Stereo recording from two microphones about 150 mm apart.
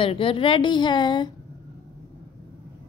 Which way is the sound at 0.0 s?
35° left (ahead or behind).